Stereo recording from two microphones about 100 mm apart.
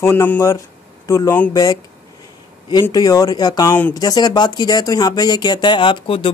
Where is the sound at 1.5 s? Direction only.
35° left (ahead or behind).